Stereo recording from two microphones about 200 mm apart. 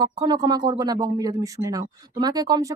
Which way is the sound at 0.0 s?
20° right (ahead or behind).